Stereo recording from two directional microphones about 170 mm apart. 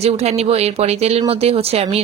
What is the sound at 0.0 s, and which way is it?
Speech, 40° right (ahead or behind).